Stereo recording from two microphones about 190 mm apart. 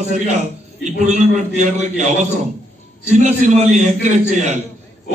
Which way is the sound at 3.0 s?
35° right (ahead or behind).